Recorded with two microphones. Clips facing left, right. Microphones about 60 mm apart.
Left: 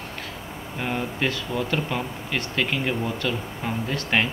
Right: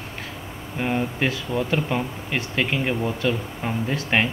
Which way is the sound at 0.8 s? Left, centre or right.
Centre.